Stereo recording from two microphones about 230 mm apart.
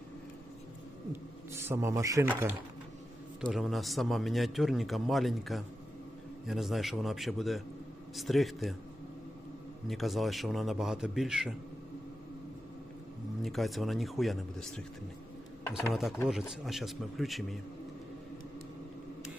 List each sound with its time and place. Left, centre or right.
1.1 s a man's voice: centre
9.8 s a man's voice: centre
13.4 s a man's voice: centre
15.9 s a man's voice: centre